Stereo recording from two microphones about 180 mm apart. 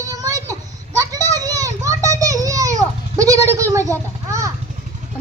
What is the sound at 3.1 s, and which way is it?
Goat, 20° right (ahead or behind).